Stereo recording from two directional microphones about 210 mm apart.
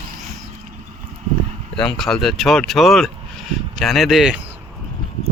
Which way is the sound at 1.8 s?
Centre (ahead or behind).